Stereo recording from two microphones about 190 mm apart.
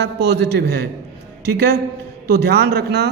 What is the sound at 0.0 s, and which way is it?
A man's voice, 60° right (ahead or behind).